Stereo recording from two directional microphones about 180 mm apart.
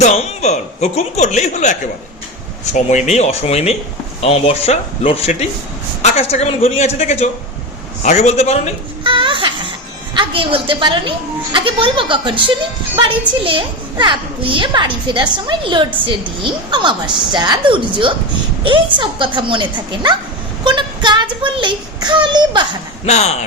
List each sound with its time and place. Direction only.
0.0 s speech: 40° left (ahead or behind)
2.7 s speech: 40° left (ahead or behind)
9.0 s a sound: 25° right (ahead or behind)
10.2 s a woman's voice: 30° right (ahead or behind)
23.0 s speech: 40° left (ahead or behind)